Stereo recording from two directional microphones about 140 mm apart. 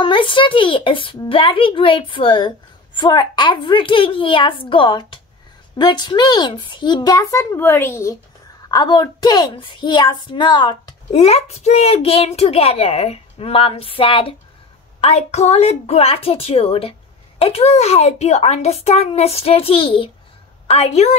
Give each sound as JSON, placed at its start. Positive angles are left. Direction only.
{"t": 0.0, "sound": "a child's voice", "side_deg": 35}
{"t": 11.1, "sound": "a child's voice", "side_deg": 50}